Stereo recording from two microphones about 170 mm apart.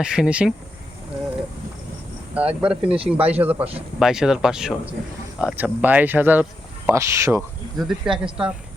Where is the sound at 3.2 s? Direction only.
35° right (ahead or behind).